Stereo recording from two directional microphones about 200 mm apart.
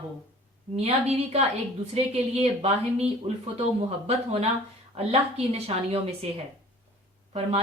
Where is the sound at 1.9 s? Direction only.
30° right (ahead or behind).